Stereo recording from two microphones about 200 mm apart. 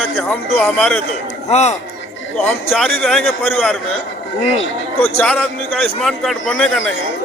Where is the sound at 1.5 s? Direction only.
35° left (ahead or behind).